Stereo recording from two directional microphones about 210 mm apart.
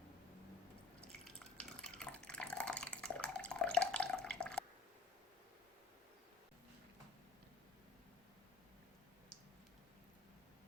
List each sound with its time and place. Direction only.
1.2 s water: 5° left (ahead or behind)